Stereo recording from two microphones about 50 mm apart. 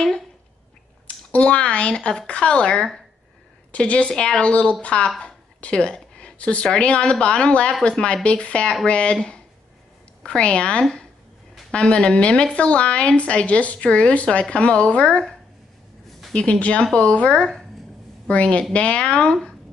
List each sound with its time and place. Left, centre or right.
1.0 s a woman's voice: left
3.7 s a woman's voice: left
4.1 s speech: centre
4.4 s a woman's voice: left
5.2 s a sound: left
6.8 s a woman's voice: left
16.3 s a woman's voice: left